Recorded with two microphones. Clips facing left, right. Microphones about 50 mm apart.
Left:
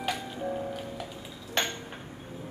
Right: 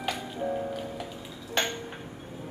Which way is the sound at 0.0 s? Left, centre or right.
Centre.